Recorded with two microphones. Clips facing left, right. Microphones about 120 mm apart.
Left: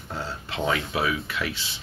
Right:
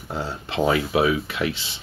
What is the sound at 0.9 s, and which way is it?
Speech, 25° right (ahead or behind).